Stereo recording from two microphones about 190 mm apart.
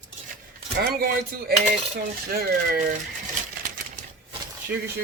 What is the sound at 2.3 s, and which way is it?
Speech, 55° right (ahead or behind).